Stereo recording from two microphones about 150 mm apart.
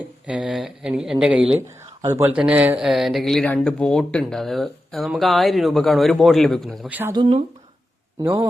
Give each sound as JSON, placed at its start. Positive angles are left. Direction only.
{"t": 0.3, "sound": "speech", "side_deg": -5}
{"t": 2.0, "sound": "speech", "side_deg": -20}
{"t": 2.3, "sound": "speech", "side_deg": -10}
{"t": 7.1, "sound": "speech", "side_deg": -35}
{"t": 8.2, "sound": "a man's voice", "side_deg": -20}